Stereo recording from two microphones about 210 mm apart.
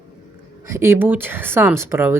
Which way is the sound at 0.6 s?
10° right (ahead or behind).